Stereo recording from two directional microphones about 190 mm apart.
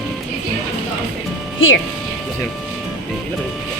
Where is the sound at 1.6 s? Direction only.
90° left.